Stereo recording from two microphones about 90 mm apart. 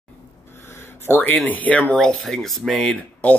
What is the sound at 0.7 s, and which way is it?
Speech, 25° left (ahead or behind).